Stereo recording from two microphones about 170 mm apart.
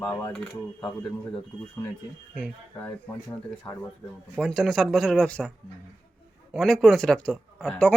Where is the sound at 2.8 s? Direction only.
10° left (ahead or behind).